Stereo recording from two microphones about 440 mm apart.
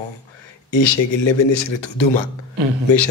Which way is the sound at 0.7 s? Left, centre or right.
Left.